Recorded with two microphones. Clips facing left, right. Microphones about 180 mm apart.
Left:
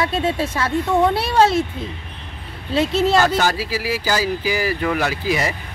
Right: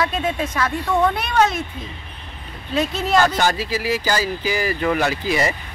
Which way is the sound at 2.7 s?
30° left (ahead or behind).